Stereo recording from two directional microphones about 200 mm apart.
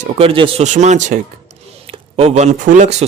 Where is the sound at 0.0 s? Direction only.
30° right (ahead or behind).